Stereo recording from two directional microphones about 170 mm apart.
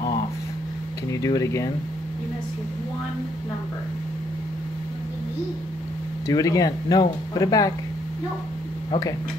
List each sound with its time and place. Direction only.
1.2 s speech: 20° left (ahead or behind)
6.2 s speech: 20° left (ahead or behind)